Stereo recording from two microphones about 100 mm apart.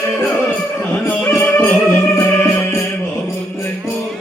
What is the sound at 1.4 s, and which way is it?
Music, 20° left (ahead or behind).